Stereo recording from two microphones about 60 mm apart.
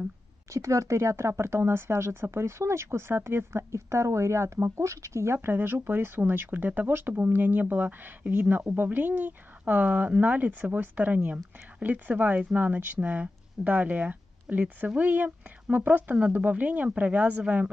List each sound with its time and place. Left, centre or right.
0.5 s speech: right
5.5 s speech: right